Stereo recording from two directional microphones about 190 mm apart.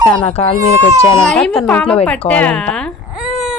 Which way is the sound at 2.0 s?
5° left (ahead or behind).